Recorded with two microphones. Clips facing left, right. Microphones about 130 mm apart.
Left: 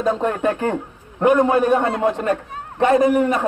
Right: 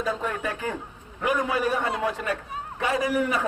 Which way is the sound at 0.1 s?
55° left (ahead or behind).